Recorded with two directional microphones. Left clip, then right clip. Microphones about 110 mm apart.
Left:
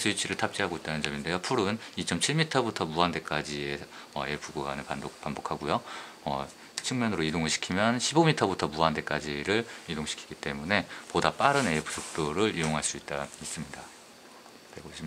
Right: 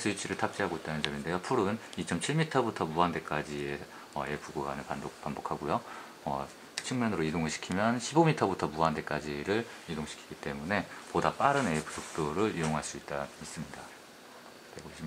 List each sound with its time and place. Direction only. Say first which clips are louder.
0.0 s speech: left 3 dB; 20° left (ahead or behind)